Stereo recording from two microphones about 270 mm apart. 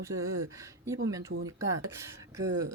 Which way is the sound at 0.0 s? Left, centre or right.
Centre.